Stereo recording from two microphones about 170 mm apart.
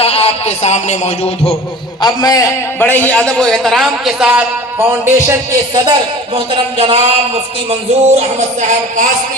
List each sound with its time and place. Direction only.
0.0 s music: 35° left (ahead or behind)
2.0 s a man's voice: 25° left (ahead or behind); by 9.0 s 45° right (ahead or behind)